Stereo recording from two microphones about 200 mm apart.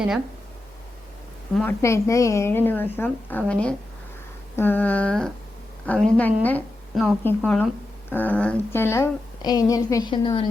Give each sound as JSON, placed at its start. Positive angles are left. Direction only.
{"t": 1.5, "sound": "a woman's voice", "side_deg": 10}